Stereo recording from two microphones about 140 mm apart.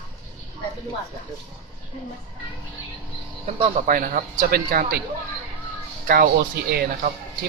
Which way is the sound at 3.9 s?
80° right.